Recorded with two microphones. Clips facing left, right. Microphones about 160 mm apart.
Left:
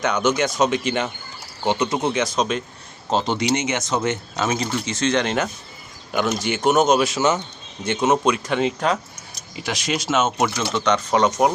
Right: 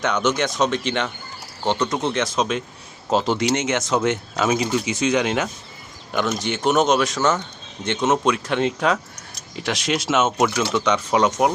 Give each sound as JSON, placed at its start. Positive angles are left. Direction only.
{"t": 0.0, "sound": "speech", "side_deg": 0}
{"t": 7.2, "sound": "speech", "side_deg": 20}
{"t": 8.0, "sound": "speech", "side_deg": 0}